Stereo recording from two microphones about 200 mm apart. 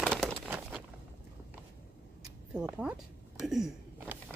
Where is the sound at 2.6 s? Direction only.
5° right (ahead or behind).